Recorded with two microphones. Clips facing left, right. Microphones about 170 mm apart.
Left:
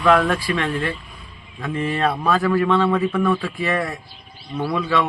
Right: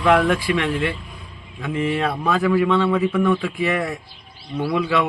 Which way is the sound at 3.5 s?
20° right (ahead or behind).